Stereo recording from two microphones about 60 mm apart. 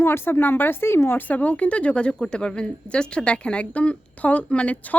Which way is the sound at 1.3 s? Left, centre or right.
Left.